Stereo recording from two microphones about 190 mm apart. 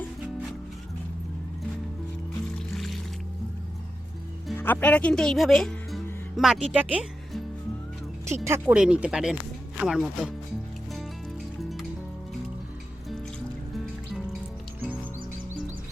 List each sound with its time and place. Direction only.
2.7 s music: centre (ahead or behind)
4.5 s speech: 10° left (ahead or behind)
8.4 s speech: 10° right (ahead or behind)